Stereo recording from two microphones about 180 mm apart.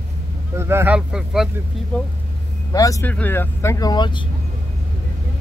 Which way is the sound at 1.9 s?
5° left (ahead or behind).